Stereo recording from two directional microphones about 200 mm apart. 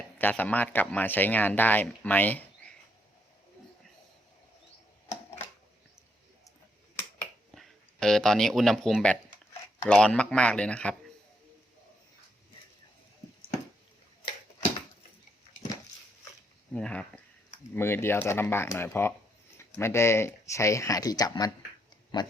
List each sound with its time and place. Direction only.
0.2 s speech: 10° left (ahead or behind)
7.5 s speech: centre (ahead or behind)
16.7 s speech: 5° left (ahead or behind); by 22.3 s 25° left (ahead or behind)